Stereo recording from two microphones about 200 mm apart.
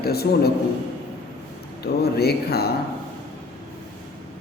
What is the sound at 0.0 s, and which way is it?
Speech, 50° left (ahead or behind).